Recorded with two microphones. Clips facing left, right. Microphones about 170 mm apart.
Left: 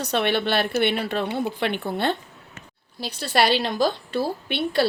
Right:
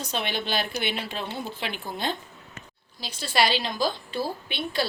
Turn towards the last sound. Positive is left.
turn(degrees=65)  # may be behind; listen again after turning